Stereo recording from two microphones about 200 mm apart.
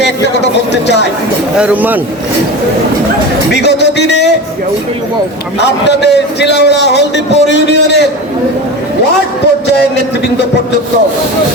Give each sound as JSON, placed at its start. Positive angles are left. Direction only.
{"t": 0.0, "sound": "a man's voice", "side_deg": 60}
{"t": 1.5, "sound": "speech", "side_deg": -5}
{"t": 3.5, "sound": "a sound", "side_deg": 60}
{"t": 5.5, "sound": "a man's voice", "side_deg": 60}